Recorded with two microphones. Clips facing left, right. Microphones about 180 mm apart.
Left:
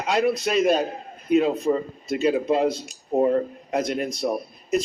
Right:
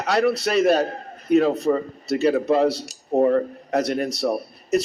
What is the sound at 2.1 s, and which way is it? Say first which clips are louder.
Speech: right 2 dB; 40° right (ahead or behind).